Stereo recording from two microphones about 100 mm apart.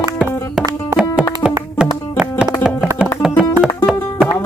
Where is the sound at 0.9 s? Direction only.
10° right (ahead or behind).